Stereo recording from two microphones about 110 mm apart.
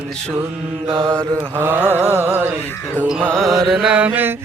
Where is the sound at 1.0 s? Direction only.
25° right (ahead or behind).